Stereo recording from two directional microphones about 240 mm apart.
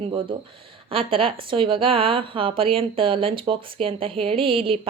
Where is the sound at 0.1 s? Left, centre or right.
Right.